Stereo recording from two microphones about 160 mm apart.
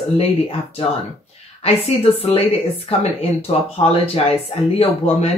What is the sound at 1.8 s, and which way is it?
Speech, 40° left (ahead or behind).